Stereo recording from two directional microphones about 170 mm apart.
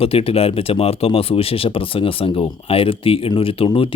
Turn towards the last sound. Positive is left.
turn(degrees=30)  # may be behind; listen again after turning